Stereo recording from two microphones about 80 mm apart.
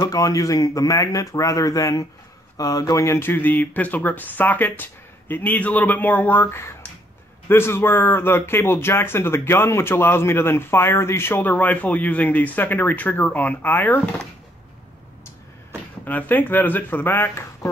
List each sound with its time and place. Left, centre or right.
0.0 s speech: left
3.2 s speech: left
16.1 s speech: left